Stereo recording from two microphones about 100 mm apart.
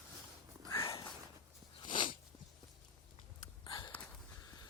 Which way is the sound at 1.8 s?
50° left (ahead or behind).